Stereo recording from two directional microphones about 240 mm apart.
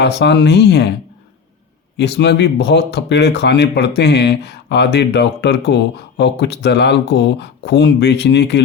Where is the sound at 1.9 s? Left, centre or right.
Left.